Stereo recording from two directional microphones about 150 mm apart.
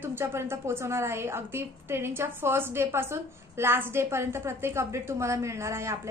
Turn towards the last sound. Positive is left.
turn(degrees=-20)  # may be behind; listen again after turning